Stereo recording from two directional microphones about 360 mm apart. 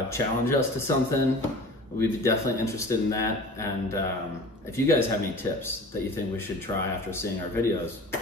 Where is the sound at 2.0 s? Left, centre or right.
Centre.